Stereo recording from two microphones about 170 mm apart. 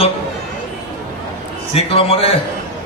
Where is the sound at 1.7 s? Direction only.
35° left (ahead or behind).